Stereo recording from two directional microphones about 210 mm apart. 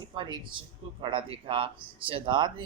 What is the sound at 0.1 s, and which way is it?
Speech, 25° right (ahead or behind).